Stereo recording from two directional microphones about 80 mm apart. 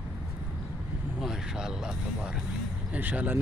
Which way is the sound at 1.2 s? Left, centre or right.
Centre.